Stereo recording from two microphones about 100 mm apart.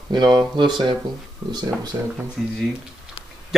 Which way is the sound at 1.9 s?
40° right (ahead or behind).